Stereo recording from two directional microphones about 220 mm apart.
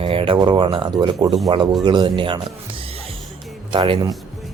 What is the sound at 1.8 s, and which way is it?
Speech, 20° right (ahead or behind).